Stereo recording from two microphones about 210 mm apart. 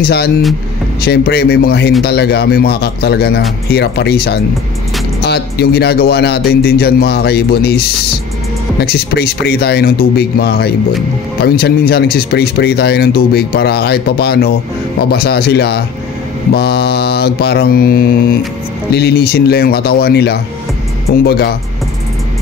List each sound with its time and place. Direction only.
0.0 s speech: 50° left (ahead or behind)
8.8 s speech: 45° left (ahead or behind)